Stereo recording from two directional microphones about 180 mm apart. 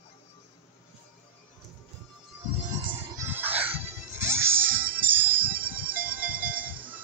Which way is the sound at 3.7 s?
35° right (ahead or behind).